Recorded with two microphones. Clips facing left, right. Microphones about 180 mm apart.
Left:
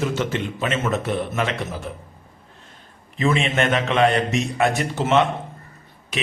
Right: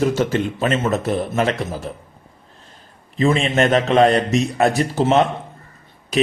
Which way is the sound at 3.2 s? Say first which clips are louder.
Right 4 dB; 35° right (ahead or behind).